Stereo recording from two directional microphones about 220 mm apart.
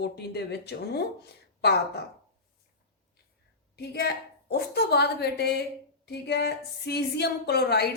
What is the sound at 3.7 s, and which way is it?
A woman's voice, 50° left (ahead or behind).